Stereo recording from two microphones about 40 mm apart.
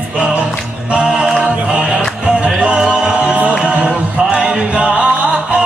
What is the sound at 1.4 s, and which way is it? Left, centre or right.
Music, right.